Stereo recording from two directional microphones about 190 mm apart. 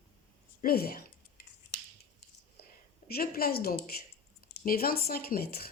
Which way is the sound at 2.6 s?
55° left (ahead or behind).